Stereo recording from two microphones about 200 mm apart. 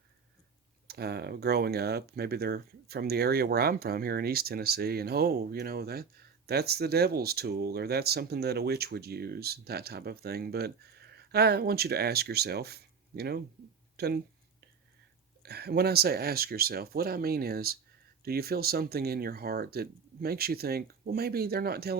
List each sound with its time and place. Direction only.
0.9 s speech: 55° right (ahead or behind)
13.9 s a sound: 55° right (ahead or behind)
15.4 s speech: 55° right (ahead or behind)